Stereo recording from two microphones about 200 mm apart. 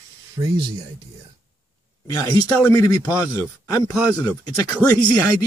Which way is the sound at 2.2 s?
15° left (ahead or behind).